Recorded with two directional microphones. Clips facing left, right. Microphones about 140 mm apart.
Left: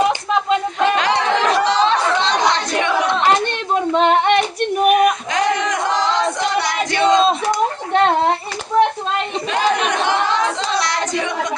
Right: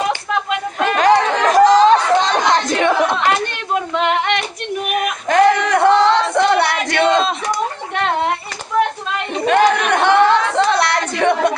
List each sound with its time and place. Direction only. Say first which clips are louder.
0.9 s chatter: right 4 dB; 45° right (ahead or behind)
3.9 s female singing: left 5 dB; 35° left (ahead or behind)
5.3 s crowd: right 6 dB; 60° right (ahead or behind)
9.5 s a sound: right 5 dB; 60° right (ahead or behind)